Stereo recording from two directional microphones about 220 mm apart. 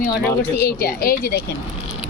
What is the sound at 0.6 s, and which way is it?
Speech, 45° left (ahead or behind).